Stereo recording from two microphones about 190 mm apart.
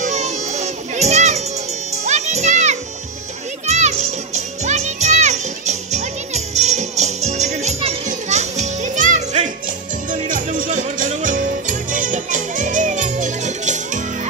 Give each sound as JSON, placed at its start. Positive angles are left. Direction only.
{"t": 0.0, "sound": "children playing", "side_deg": -35}
{"t": 3.6, "sound": "music", "side_deg": -35}